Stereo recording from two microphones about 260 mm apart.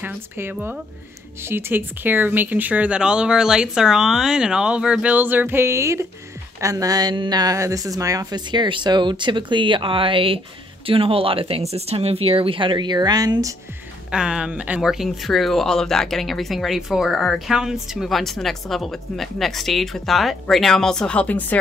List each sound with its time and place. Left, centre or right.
0.0 s a woman's voice: centre